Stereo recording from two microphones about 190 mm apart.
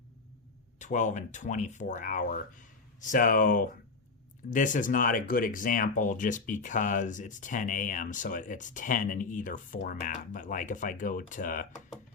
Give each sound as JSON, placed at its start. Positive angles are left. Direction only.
{"t": 0.8, "sound": "speech", "side_deg": 40}